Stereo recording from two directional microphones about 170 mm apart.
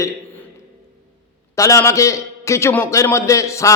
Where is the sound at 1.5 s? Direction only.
20° left (ahead or behind).